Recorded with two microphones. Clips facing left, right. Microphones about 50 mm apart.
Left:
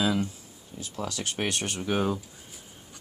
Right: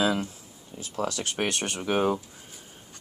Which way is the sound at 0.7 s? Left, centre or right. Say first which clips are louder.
Right 4 dB; right.